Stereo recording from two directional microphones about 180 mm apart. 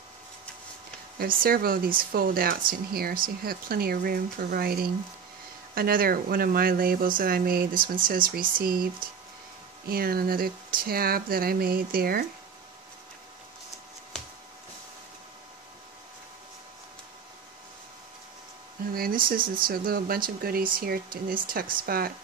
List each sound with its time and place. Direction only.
1.1 s speech: 55° right (ahead or behind)
18.9 s speech: 55° right (ahead or behind)